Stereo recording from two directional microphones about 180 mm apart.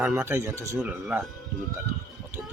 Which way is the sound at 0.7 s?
5° right (ahead or behind).